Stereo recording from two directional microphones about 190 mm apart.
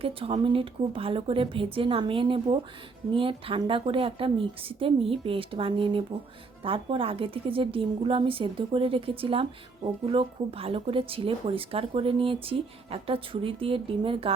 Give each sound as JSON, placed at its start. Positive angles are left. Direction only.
{"t": 0.0, "sound": "a woman's voice", "side_deg": -30}